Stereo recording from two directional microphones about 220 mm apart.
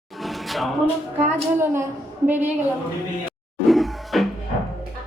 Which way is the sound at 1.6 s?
10° right (ahead or behind).